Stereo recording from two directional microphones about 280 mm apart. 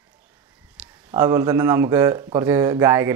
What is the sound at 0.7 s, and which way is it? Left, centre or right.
Speech, centre.